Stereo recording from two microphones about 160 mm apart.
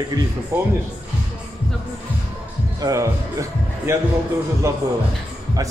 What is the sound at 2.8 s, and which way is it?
A man's voice, 25° right (ahead or behind).